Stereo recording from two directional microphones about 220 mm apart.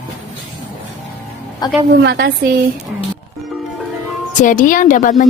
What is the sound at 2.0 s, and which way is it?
Speech, 50° right (ahead or behind).